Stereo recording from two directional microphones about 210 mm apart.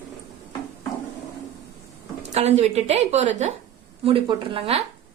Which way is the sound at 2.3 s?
30° right (ahead or behind).